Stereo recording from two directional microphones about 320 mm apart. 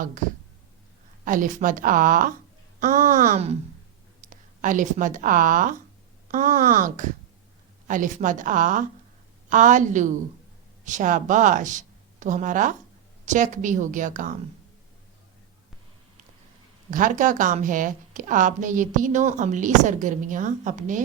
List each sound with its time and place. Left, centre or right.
1.2 s a woman's voice: right
16.9 s a woman's voice: right